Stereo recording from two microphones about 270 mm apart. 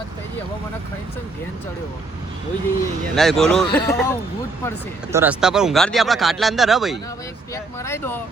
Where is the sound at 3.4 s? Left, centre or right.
Centre.